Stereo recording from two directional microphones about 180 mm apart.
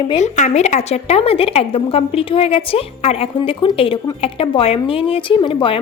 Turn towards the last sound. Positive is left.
turn(degrees=30)  # may be behind; listen again after turning